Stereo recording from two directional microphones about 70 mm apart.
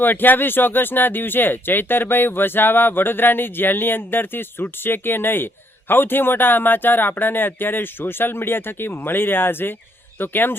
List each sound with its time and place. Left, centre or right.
0.0 s speech: left